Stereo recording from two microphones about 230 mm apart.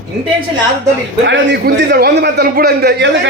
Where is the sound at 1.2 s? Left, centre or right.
Right.